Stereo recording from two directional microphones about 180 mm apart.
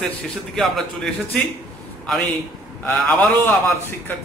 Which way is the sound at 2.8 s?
10° left (ahead or behind).